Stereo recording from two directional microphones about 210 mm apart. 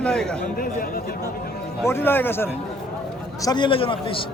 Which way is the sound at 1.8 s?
10° left (ahead or behind).